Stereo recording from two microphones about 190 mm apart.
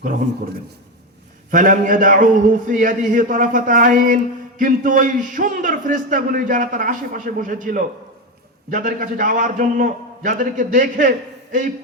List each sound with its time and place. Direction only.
1.5 s a man's voice: 45° right (ahead or behind)